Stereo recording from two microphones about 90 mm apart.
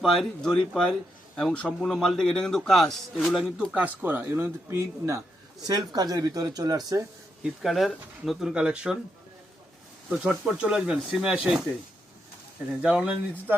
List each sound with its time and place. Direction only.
0.0 s a man's voice: centre (ahead or behind)
3.8 s speech: 20° right (ahead or behind)
5.6 s speech: 50° right (ahead or behind)
7.4 s a man's voice: centre (ahead or behind)
10.1 s speech: 10° right (ahead or behind)
12.8 s speech: 10° right (ahead or behind)